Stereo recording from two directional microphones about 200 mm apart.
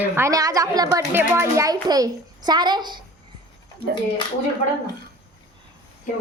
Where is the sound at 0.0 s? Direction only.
15° right (ahead or behind).